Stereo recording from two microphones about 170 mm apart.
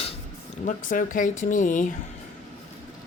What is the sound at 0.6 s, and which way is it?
Speech, 50° left (ahead or behind).